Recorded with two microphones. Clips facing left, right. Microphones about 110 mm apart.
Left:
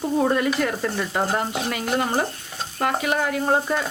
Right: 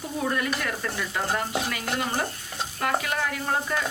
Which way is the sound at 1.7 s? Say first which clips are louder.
Left 5 dB; 25° left (ahead or behind).